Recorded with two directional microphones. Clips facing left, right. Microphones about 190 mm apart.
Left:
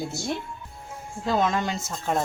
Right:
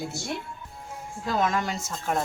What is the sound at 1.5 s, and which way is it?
Speech, 20° left (ahead or behind).